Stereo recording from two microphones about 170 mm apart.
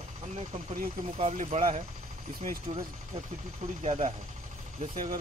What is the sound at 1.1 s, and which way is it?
Speech, 35° right (ahead or behind).